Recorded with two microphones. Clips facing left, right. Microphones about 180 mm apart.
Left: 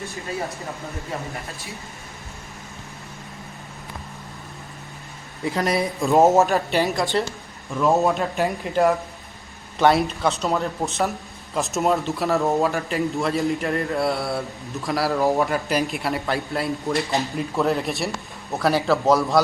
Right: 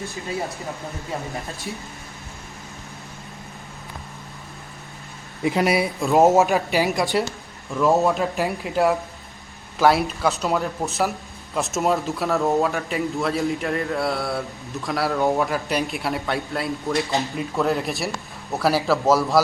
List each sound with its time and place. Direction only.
5.4 s speech: 15° right (ahead or behind)
6.9 s a woman's voice: 20° right (ahead or behind)
7.8 s speech: centre (ahead or behind)